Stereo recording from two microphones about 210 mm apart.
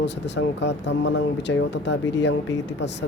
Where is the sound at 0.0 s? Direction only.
55° left (ahead or behind).